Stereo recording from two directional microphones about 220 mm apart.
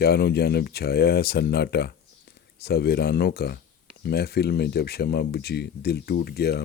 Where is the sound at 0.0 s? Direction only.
45° left (ahead or behind).